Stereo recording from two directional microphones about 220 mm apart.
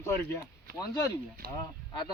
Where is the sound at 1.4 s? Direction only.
40° right (ahead or behind).